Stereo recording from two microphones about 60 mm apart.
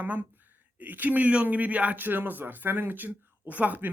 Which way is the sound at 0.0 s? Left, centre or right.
Right.